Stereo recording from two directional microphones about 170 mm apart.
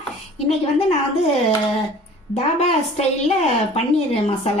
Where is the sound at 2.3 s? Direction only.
40° left (ahead or behind).